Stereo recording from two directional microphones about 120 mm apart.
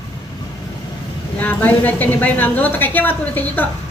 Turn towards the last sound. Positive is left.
turn(degrees=15)  # may be behind; listen again after turning